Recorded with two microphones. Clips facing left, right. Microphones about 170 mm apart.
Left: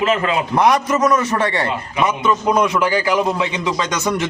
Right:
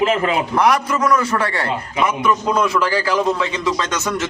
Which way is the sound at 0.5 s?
20° left (ahead or behind).